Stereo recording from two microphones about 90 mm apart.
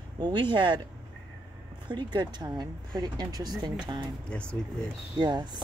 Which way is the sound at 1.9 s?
55° right (ahead or behind).